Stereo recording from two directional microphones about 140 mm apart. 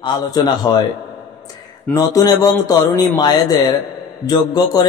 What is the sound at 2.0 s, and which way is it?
A man's voice, 25° left (ahead or behind).